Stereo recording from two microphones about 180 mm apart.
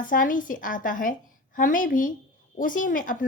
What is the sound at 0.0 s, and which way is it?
Speech, 50° left (ahead or behind).